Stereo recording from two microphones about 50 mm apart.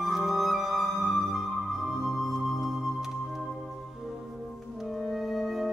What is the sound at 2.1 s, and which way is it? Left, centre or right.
Music, centre.